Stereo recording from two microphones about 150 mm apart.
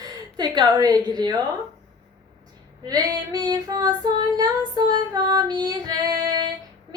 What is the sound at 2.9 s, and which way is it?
Female singing, 25° right (ahead or behind).